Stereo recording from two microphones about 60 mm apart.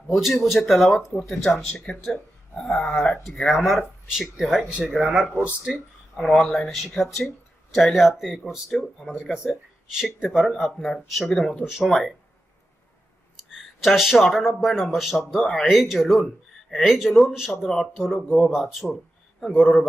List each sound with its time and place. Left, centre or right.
0.1 s speech: centre
1.9 s dog: centre
3.3 s speech: centre
6.1 s speech: centre
9.3 s speech: centre
10.6 s speech: centre
13.5 s speech: centre